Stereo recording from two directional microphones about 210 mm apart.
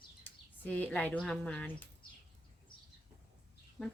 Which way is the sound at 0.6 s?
5° left (ahead or behind).